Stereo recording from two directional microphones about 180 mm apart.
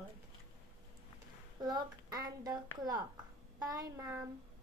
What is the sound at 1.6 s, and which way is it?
A woman's voice, 20° right (ahead or behind).